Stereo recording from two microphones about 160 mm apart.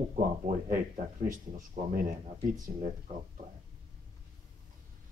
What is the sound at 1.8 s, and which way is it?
Speech, 40° right (ahead or behind).